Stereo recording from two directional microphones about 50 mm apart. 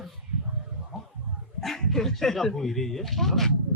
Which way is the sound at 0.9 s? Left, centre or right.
Centre.